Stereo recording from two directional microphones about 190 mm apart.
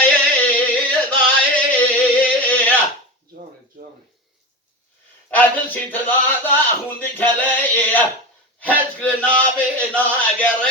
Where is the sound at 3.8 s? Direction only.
45° right (ahead or behind).